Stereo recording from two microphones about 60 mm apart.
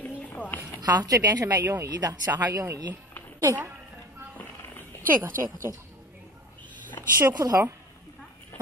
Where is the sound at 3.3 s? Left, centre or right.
Right.